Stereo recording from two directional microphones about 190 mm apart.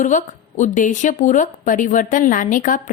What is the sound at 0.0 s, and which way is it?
A woman's voice, 40° left (ahead or behind).